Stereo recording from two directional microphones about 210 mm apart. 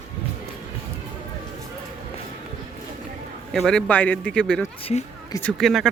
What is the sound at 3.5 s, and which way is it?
Speech, centre (ahead or behind).